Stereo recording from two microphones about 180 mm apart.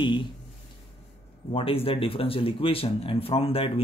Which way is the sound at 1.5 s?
30° left (ahead or behind).